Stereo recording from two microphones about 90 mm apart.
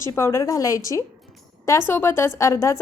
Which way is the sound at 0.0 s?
30° left (ahead or behind).